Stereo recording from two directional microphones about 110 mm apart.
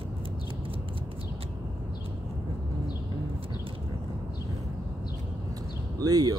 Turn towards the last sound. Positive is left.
turn(degrees=-35)  # may be behind; listen again after turning